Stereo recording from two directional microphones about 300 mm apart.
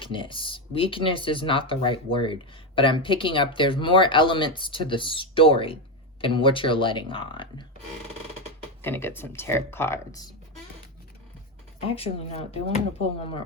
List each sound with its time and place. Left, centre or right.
0.0 s speech: centre
8.8 s speech: centre
11.9 s speech: centre